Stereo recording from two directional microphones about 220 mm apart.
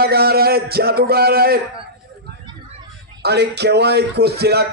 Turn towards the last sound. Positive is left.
turn(degrees=-45)  # may be behind; listen again after turning